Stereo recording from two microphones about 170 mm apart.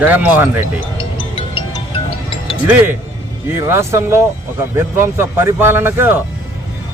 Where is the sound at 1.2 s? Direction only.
30° left (ahead or behind).